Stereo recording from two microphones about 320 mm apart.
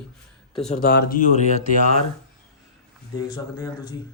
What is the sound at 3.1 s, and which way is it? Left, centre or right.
Speech, centre.